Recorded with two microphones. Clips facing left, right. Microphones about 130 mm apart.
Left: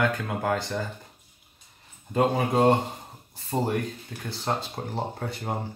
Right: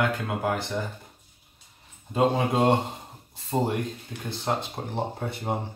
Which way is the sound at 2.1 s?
20° right (ahead or behind).